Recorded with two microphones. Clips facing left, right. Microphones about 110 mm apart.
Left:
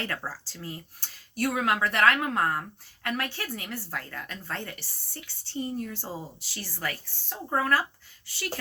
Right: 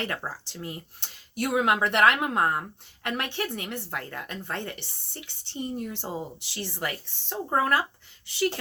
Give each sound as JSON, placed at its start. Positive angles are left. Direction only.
{"t": 0.0, "sound": "speech", "side_deg": -20}